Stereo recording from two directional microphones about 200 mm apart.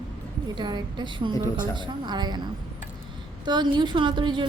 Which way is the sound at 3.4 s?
20° right (ahead or behind).